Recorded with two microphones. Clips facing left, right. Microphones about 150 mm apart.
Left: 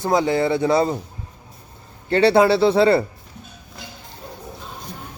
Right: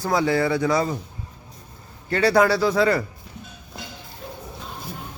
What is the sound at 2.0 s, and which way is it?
A man's voice, 30° left (ahead or behind).